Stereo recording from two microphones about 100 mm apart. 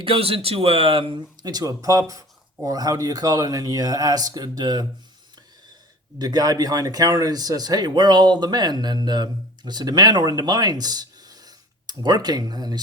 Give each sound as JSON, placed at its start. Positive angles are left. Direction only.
{"t": 0.0, "sound": "speech", "side_deg": -70}
{"t": 1.4, "sound": "speech", "side_deg": -40}
{"t": 6.1, "sound": "speech", "side_deg": -40}